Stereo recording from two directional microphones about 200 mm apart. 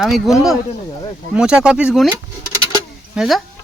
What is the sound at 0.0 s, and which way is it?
Speech, centre (ahead or behind).